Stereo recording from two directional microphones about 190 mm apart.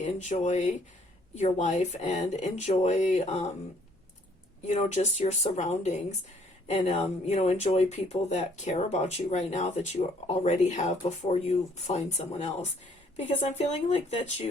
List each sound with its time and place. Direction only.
0.0 s speech: 40° left (ahead or behind)
4.6 s speech: 35° left (ahead or behind)